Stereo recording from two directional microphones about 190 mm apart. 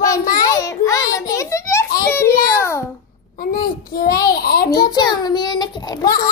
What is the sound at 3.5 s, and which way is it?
A child's voice, 50° left (ahead or behind).